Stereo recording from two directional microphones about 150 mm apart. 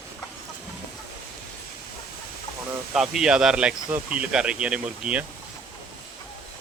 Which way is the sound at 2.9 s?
5° right (ahead or behind).